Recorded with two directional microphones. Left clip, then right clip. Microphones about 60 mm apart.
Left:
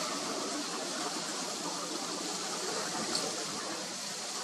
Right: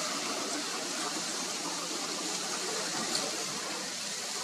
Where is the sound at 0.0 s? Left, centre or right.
Right.